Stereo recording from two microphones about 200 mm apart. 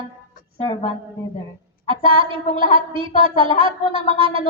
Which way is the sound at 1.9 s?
25° right (ahead or behind).